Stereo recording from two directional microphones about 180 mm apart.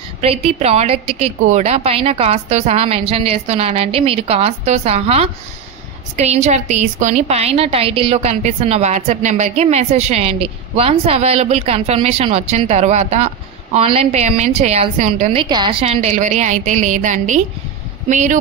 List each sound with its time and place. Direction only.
0.2 s a woman's voice: 35° right (ahead or behind)
15.3 s a woman's voice: 25° right (ahead or behind); by 18.4 s 40° right (ahead or behind)